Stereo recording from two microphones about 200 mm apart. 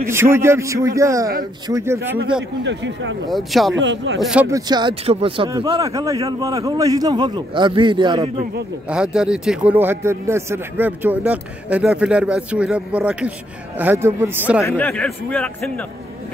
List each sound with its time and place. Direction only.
0.1 s a man's voice: 15° right (ahead or behind)
2.6 s speech: 65° right (ahead or behind)
3.3 s a man's voice: centre (ahead or behind)
3.7 s speech: 65° right (ahead or behind)
4.2 s a man's voice: 5° right (ahead or behind)
4.5 s a man's voice: 20° right (ahead or behind)
8.8 s a man's voice: 5° right (ahead or behind)
14.6 s a man's voice: 10° left (ahead or behind)